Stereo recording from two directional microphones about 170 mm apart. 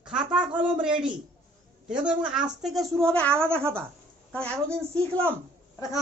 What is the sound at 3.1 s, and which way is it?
Speech, 5° left (ahead or behind).